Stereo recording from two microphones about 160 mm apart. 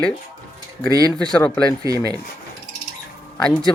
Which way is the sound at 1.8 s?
20° right (ahead or behind).